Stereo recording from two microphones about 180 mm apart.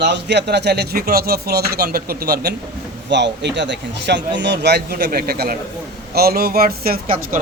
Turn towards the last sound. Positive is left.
turn(degrees=-50)  # may be behind; listen again after turning